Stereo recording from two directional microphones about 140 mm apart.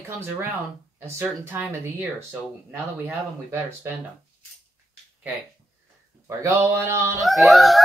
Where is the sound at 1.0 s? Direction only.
15° right (ahead or behind).